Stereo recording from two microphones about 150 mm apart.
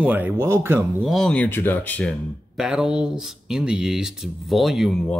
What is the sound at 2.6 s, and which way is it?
Speech, 5° right (ahead or behind).